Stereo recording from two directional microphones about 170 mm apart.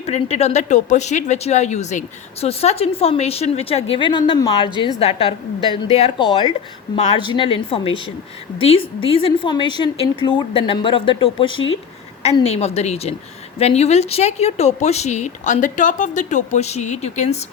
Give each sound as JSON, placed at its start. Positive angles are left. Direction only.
{"t": 0.0, "sound": "speech", "side_deg": 40}